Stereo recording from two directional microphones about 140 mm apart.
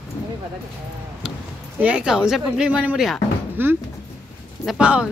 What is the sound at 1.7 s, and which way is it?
Speech, 10° right (ahead or behind).